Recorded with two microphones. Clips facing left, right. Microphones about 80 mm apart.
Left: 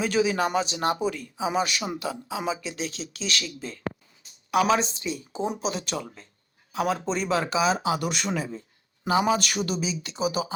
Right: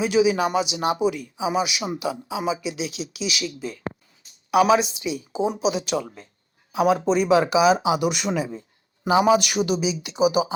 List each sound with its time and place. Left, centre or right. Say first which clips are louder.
0.0 s speech: right 4 dB; centre
2.7 s speech: right 3 dB; left
3.1 s speech: right 2 dB; centre
4.5 s speech: right 5 dB; centre